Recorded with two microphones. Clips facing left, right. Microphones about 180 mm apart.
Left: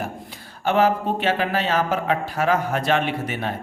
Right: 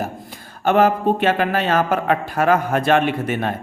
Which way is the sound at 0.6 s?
50° right (ahead or behind).